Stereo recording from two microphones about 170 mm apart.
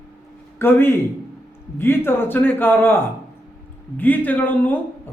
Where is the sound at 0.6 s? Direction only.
15° left (ahead or behind).